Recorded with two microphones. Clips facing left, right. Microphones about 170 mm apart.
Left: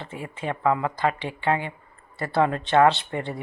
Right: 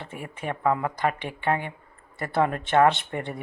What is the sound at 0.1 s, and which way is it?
Speech, 20° left (ahead or behind).